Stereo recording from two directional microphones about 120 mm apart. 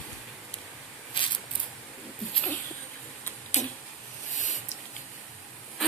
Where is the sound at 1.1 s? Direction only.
45° left (ahead or behind).